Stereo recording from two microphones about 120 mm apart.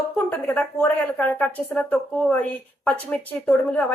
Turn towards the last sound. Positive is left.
turn(degrees=15)  # may be behind; listen again after turning